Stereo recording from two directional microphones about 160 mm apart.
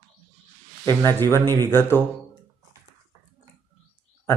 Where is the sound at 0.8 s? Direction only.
15° left (ahead or behind).